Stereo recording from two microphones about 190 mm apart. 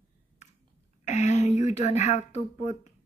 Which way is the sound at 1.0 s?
40° left (ahead or behind).